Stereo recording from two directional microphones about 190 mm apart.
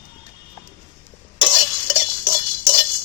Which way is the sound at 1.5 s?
10° right (ahead or behind).